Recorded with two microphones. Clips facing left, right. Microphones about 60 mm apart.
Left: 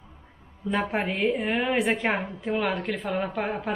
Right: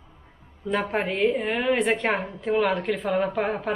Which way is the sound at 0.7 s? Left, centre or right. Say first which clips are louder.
Right 1 dB; centre.